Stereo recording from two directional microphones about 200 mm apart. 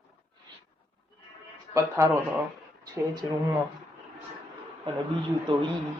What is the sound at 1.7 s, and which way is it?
Speech, 15° right (ahead or behind).